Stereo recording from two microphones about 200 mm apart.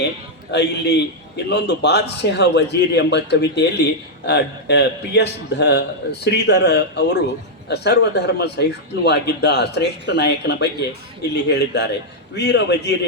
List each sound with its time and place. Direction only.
0.5 s a man's voice: 55° left (ahead or behind)